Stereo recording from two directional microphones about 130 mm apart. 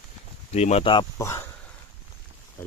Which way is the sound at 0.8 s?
40° left (ahead or behind).